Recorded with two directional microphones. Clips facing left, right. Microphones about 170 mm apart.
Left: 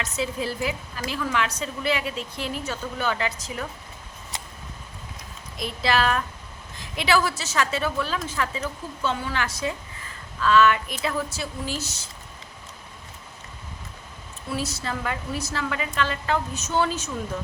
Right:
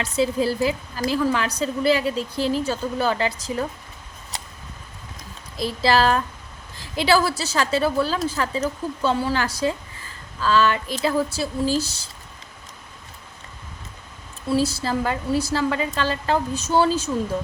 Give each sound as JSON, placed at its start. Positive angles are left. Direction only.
{"t": 0.0, "sound": "a woman's voice", "side_deg": -35}
{"t": 5.5, "sound": "a woman's voice", "side_deg": -35}
{"t": 14.5, "sound": "a woman's voice", "side_deg": -30}